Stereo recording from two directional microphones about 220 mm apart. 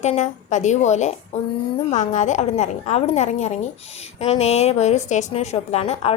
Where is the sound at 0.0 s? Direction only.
30° left (ahead or behind).